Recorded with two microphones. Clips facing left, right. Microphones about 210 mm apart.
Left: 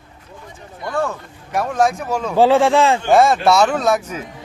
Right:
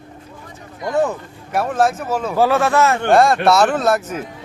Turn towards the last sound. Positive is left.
turn(degrees=-5)  # may be behind; listen again after turning